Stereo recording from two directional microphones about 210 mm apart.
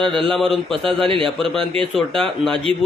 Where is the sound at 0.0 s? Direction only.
25° right (ahead or behind).